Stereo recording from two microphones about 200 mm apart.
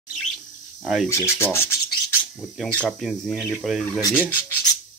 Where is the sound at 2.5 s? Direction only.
5° left (ahead or behind).